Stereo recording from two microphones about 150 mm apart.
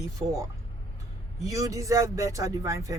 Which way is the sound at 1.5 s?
20° right (ahead or behind).